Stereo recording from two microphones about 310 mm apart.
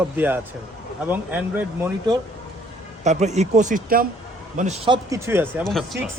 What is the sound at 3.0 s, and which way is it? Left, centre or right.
A man's voice, right.